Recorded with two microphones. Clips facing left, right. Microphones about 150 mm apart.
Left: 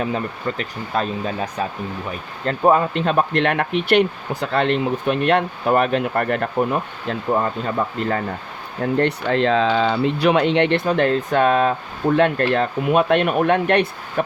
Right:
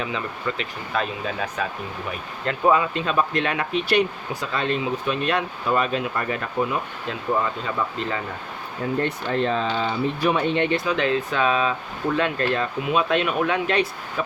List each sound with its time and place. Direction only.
0.0 s speech: 45° left (ahead or behind)
8.8 s speech: 80° left
10.8 s speech: 45° left (ahead or behind)